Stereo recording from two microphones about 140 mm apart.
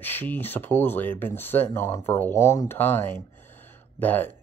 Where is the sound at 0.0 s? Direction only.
15° left (ahead or behind).